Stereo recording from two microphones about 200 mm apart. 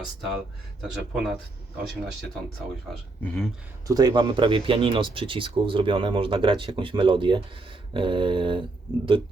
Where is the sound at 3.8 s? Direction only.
20° right (ahead or behind).